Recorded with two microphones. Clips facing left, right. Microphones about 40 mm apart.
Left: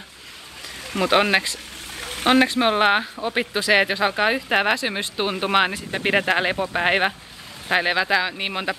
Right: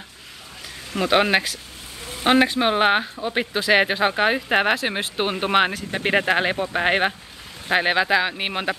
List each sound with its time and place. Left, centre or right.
1.1 s speech: centre
2.0 s a sound: left
2.2 s speech: centre
3.6 s speech: centre